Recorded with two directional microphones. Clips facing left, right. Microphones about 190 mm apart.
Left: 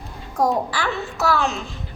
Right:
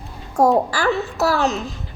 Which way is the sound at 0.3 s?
45° right (ahead or behind).